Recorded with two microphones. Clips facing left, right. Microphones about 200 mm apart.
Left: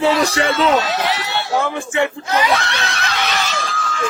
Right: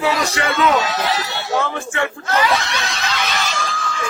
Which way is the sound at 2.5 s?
60° left (ahead or behind).